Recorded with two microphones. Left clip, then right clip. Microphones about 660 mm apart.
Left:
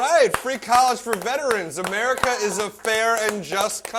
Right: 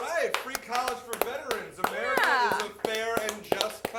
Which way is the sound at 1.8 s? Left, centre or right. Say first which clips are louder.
Left 3 dB; left.